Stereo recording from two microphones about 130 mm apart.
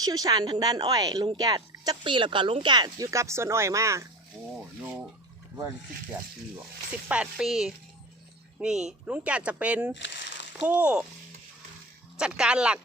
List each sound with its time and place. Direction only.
0.0 s a woman's voice: 30° right (ahead or behind)
7.1 s speech: 5° right (ahead or behind)
12.1 s speech: 5° right (ahead or behind)